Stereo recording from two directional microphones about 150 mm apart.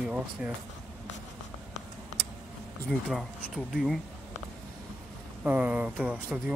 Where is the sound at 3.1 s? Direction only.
Centre (ahead or behind).